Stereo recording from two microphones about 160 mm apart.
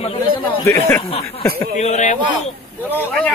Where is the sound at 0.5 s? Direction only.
15° left (ahead or behind).